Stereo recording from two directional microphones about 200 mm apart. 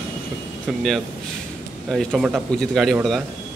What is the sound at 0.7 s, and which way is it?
Speech, centre (ahead or behind).